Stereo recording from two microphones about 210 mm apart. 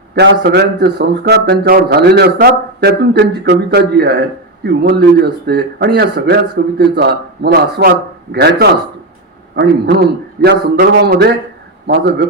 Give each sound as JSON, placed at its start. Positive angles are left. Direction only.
{"t": 0.2, "sound": "a man's voice", "side_deg": -50}